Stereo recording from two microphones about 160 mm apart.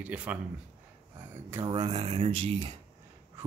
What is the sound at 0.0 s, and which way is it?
Speech, 10° right (ahead or behind).